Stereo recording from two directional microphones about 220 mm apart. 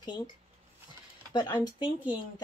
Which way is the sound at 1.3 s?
20° left (ahead or behind).